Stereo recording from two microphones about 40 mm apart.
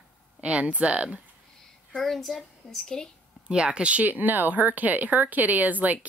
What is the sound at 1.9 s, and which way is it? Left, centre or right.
A woman's voice, centre.